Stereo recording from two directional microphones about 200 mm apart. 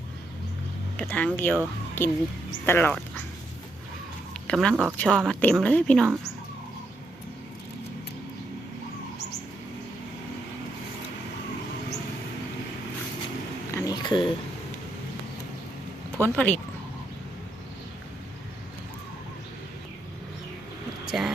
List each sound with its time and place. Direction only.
0.9 s speech: 5° left (ahead or behind)
4.4 s speech: 5° left (ahead or behind)
4.7 s speech: 10° right (ahead or behind)
4.9 s speech: centre (ahead or behind)
13.7 s a sound: 15° left (ahead or behind)
16.1 s speech: 10° left (ahead or behind)
21.1 s a sound: centre (ahead or behind)